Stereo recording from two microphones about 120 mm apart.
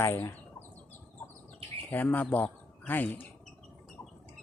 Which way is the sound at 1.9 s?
15° left (ahead or behind).